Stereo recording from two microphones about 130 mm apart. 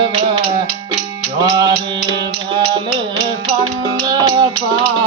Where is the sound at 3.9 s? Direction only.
35° right (ahead or behind).